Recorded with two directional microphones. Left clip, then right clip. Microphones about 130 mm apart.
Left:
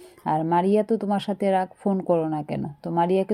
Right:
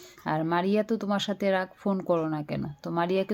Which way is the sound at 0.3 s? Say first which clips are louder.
Left 5 dB; 25° left (ahead or behind).